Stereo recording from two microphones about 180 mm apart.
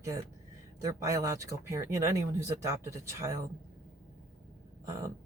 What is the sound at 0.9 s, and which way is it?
Speech, 15° right (ahead or behind).